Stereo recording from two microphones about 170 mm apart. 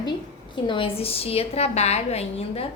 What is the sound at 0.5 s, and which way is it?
A woman's voice, 30° left (ahead or behind).